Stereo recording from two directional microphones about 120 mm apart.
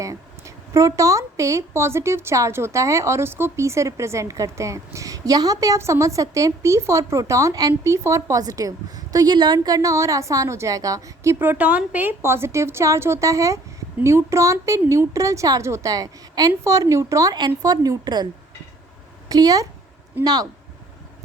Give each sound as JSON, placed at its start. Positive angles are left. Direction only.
{"t": 0.0, "sound": "a woman's voice", "side_deg": -25}
{"t": 17.3, "sound": "speech", "side_deg": -35}
{"t": 19.3, "sound": "speech", "side_deg": -30}